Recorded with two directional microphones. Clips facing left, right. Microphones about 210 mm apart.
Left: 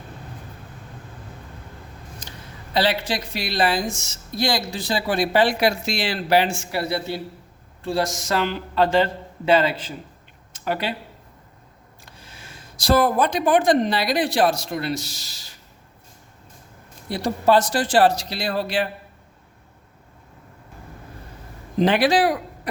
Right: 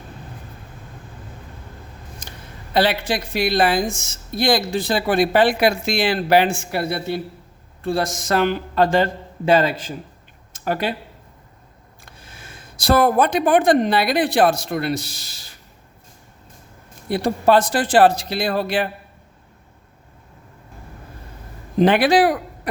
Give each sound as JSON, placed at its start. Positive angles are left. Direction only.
{"t": 2.7, "sound": "a woman's voice", "side_deg": -55}
{"t": 12.0, "sound": "speech", "side_deg": -55}
{"t": 17.1, "sound": "speech", "side_deg": -55}
{"t": 21.8, "sound": "speech", "side_deg": -55}